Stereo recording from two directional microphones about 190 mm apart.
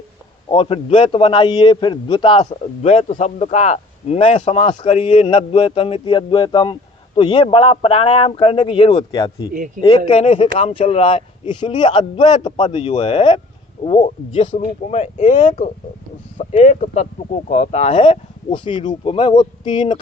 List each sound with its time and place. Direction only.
0.5 s a man's voice: 30° left (ahead or behind)
9.5 s speech: 45° right (ahead or behind)
10.1 s a man's voice: 30° left (ahead or behind)